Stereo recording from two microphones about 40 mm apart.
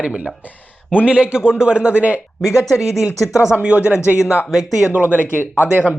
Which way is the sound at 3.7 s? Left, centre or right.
Right.